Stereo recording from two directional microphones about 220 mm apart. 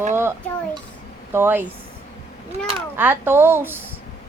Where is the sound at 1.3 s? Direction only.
10° right (ahead or behind).